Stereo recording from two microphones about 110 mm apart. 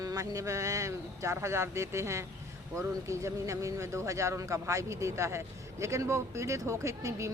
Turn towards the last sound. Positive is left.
turn(degrees=-30)  # may be behind; listen again after turning